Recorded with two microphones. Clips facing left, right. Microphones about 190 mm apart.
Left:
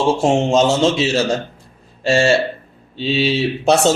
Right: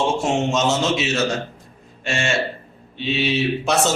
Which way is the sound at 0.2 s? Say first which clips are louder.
Left 6 dB; 30° left (ahead or behind).